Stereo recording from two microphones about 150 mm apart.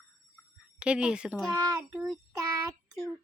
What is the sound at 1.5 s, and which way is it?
Speech, 25° right (ahead or behind).